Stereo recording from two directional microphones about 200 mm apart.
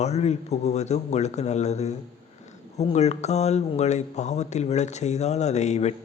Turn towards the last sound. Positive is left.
turn(degrees=35)  # may be behind; listen again after turning